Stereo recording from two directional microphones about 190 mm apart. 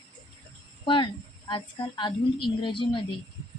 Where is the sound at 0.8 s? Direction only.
25° left (ahead or behind).